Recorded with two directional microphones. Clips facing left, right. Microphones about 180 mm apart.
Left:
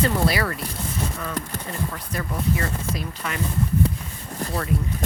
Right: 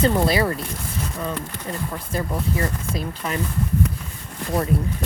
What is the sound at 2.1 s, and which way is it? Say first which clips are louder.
Speech: right 1 dB; 30° right (ahead or behind).